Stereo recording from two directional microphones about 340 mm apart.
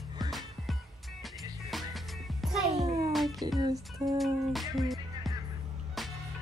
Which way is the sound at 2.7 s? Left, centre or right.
Centre.